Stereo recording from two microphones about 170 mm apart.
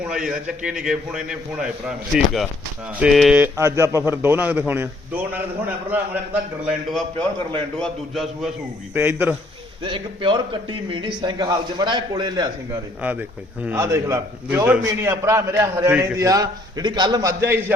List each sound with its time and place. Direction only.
0.0 s a man's voice: 5° right (ahead or behind)
7.8 s a man's voice: centre (ahead or behind)
9.0 s a man's voice: 10° right (ahead or behind)
9.8 s a man's voice: 30° right (ahead or behind)
13.0 s a man's voice: 10° right (ahead or behind)